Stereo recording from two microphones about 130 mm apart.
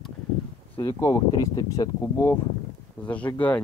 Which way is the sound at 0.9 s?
25° left (ahead or behind).